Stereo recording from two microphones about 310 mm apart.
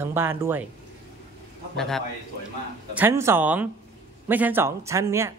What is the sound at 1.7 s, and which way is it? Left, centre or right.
A man's voice, centre.